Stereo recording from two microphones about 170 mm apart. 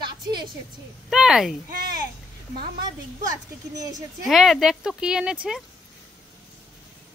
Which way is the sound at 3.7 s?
20° right (ahead or behind).